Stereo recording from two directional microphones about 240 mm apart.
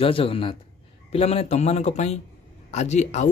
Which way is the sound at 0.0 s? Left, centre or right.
Left.